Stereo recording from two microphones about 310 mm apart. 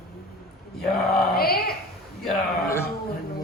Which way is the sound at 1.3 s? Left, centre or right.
Left.